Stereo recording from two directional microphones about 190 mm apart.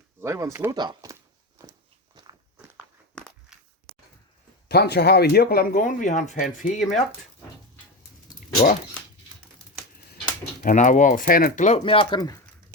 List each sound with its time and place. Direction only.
0.2 s speech: 15° right (ahead or behind)
3.2 s walk: centre (ahead or behind)
4.7 s speech: 60° left (ahead or behind); by 7.0 s 45° left (ahead or behind)
10.6 s speech: 40° left (ahead or behind)
11.8 s speech: 25° left (ahead or behind)